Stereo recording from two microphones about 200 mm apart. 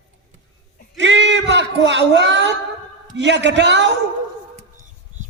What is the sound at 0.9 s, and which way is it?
A man's voice, 60° right (ahead or behind).